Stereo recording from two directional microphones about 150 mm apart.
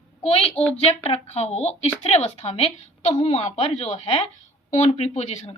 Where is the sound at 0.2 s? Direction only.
40° left (ahead or behind).